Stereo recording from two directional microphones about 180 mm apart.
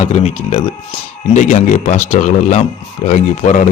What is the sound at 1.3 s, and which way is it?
Speech, 45° left (ahead or behind).